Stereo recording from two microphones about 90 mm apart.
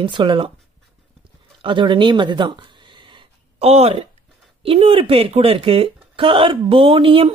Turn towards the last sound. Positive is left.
turn(degrees=-90)